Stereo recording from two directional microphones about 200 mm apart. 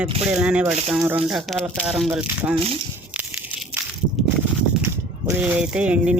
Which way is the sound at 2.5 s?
30° right (ahead or behind).